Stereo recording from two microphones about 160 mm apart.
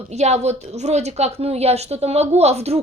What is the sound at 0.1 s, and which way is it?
A woman's voice, 45° right (ahead or behind).